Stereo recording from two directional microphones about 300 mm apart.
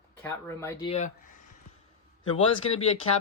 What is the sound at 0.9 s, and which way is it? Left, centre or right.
Speech, left.